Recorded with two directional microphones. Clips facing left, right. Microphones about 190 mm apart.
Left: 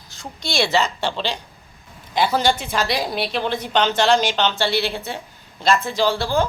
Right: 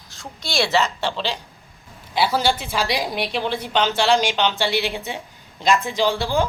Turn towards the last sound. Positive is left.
turn(degrees=-15)  # may be behind; listen again after turning